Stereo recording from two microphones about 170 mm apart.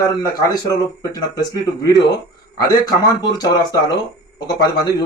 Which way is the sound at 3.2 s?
25° left (ahead or behind).